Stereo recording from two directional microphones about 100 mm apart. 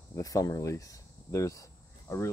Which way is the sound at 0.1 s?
35° left (ahead or behind).